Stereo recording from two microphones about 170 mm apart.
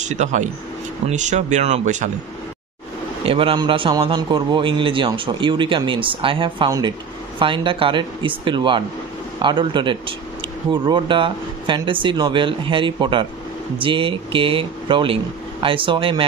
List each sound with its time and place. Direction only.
0.0 s speech: 45° right (ahead or behind)
3.3 s a man's voice: 30° right (ahead or behind)